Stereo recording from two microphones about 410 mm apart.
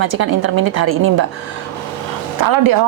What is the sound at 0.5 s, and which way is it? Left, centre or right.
Speech, right.